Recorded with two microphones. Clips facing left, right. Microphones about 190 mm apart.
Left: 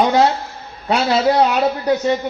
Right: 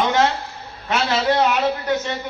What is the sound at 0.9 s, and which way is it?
A man's voice, 35° left (ahead or behind).